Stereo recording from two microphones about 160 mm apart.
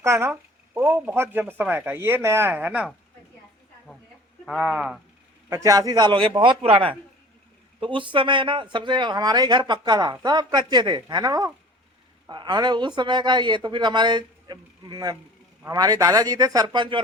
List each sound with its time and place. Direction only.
0.0 s speech: 15° right (ahead or behind)
4.4 s speech: 5° right (ahead or behind)
5.5 s a woman's voice: 20° right (ahead or behind)